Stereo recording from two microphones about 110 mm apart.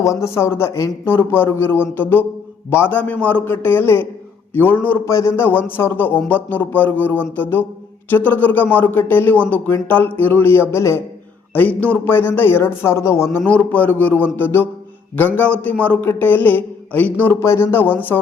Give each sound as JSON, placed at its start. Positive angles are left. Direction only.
{"t": 0.0, "sound": "a man's voice", "side_deg": 30}
{"t": 13.4, "sound": "a man's voice", "side_deg": 10}